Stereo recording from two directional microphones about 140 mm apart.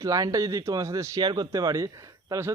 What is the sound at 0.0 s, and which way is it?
Speech, 25° right (ahead or behind).